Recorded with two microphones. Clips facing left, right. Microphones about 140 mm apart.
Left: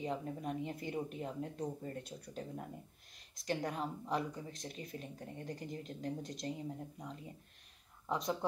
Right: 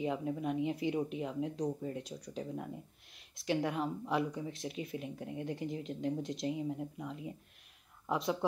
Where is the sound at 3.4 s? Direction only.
Centre (ahead or behind).